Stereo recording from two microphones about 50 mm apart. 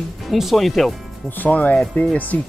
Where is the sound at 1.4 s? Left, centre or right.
Left.